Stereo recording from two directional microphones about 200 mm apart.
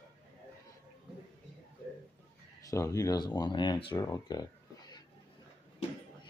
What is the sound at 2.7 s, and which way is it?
Speech, 15° left (ahead or behind).